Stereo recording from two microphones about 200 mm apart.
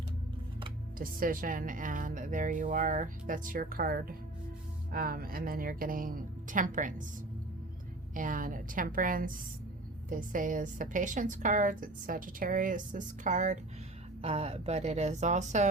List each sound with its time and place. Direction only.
0.9 s speech: 45° right (ahead or behind)
8.1 s a woman's voice: 40° right (ahead or behind)